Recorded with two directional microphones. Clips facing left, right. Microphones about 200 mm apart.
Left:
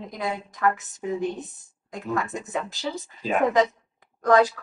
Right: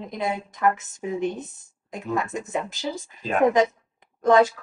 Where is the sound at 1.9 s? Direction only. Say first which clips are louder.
Right 1 dB; 20° right (ahead or behind).